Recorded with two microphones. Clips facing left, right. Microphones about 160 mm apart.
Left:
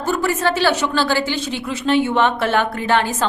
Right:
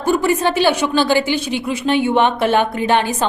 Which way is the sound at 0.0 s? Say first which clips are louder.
Right 3 dB; 15° right (ahead or behind).